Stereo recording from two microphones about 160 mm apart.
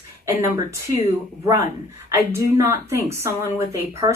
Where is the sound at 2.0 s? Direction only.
15° right (ahead or behind).